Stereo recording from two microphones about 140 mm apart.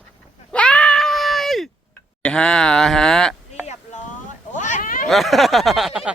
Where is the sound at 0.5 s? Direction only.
10° left (ahead or behind).